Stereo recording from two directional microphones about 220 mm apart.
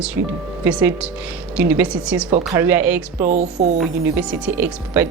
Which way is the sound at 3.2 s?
30° right (ahead or behind).